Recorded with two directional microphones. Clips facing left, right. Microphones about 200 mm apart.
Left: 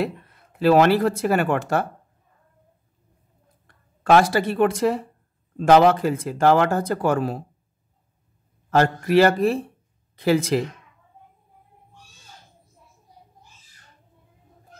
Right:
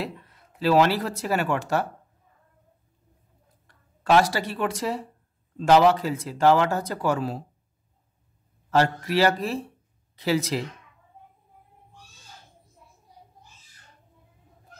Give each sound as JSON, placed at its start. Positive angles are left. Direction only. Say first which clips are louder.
{"t": 0.0, "sound": "speech", "louder": "left 7 dB", "side_deg": 55}
{"t": 3.6, "sound": "speech", "louder": "left 3 dB", "side_deg": 55}
{"t": 8.6, "sound": "speech", "louder": "left 3 dB", "side_deg": 50}